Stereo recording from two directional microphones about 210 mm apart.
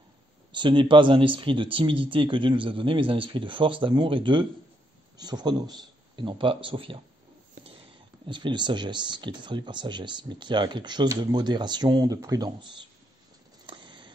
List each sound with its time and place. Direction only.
0.5 s speech: 20° right (ahead or behind)
8.3 s speech: 20° right (ahead or behind)
13.7 s a sound: 25° right (ahead or behind)